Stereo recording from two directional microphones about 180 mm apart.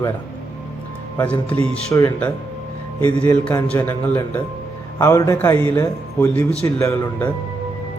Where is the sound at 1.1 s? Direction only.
10° left (ahead or behind).